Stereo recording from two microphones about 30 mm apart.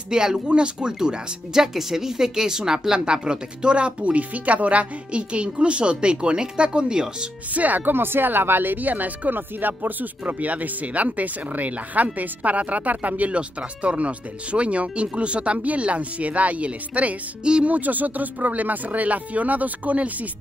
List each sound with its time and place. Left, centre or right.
0.1 s speech: right
0.5 s speech: right
3.1 s speech: right
7.5 s speech: right
17.6 s speech: right